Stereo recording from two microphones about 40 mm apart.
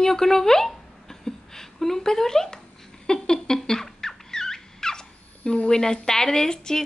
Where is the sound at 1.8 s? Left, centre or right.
Centre.